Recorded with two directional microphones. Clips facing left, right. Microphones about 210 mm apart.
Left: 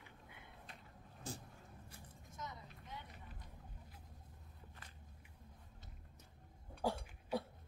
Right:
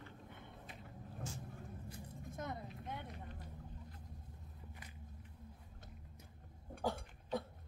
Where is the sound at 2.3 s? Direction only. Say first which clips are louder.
Right 6 dB; 55° right (ahead or behind).